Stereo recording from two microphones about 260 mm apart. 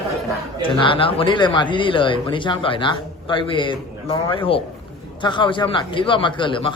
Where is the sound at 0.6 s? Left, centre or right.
Centre.